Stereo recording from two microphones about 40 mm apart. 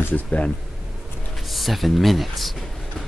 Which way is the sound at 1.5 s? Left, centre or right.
Centre.